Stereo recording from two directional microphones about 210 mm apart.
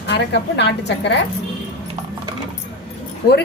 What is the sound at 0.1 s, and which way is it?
A woman's voice, 55° left (ahead or behind).